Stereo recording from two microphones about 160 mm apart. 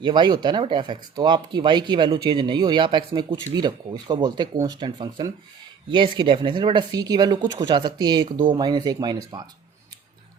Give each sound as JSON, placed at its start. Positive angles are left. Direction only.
{"t": 0.0, "sound": "speech", "side_deg": -25}